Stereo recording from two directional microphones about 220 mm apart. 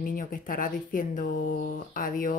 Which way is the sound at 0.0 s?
40° left (ahead or behind).